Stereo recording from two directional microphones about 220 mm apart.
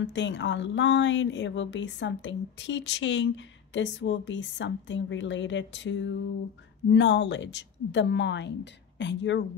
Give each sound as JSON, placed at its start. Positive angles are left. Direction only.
{"t": 0.0, "sound": "speech", "side_deg": 55}